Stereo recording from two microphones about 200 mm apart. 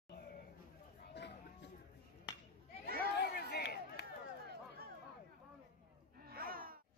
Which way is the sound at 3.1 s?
55° left (ahead or behind).